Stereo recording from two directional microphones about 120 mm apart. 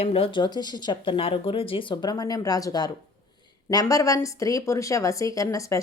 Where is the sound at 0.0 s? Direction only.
50° left (ahead or behind).